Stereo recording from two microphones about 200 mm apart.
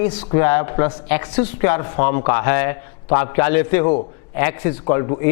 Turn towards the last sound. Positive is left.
turn(degrees=20)  # may be behind; listen again after turning